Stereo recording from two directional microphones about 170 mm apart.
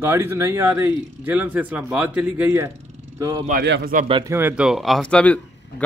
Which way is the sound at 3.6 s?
90° right.